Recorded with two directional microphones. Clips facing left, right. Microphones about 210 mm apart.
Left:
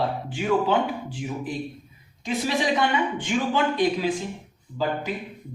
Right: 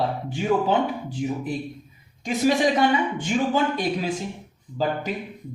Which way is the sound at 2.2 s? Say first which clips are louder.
Right 4 dB; 45° right (ahead or behind).